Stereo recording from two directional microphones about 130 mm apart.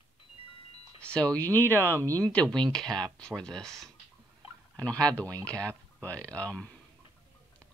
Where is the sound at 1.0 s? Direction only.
10° left (ahead or behind).